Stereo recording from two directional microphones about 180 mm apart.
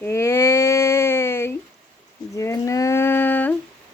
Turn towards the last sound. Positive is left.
turn(degrees=10)  # may be behind; listen again after turning